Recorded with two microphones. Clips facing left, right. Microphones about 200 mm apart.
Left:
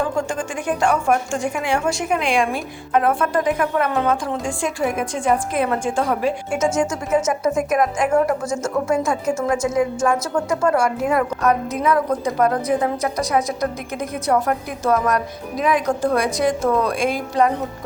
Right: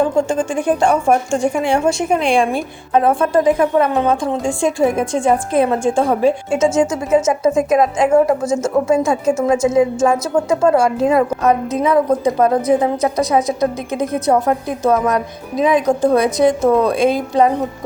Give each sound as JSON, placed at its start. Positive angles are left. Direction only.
{"t": 0.0, "sound": "a woman's voice", "side_deg": -25}